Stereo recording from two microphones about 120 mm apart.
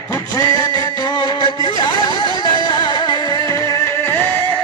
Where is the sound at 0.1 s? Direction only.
30° left (ahead or behind).